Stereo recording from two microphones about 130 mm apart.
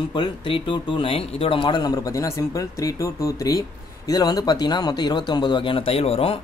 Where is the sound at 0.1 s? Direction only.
40° left (ahead or behind).